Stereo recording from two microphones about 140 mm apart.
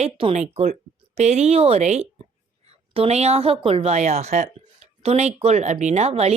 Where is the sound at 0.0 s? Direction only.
40° right (ahead or behind).